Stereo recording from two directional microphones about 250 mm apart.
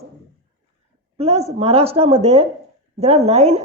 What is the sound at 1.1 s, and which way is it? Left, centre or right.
Speech, right.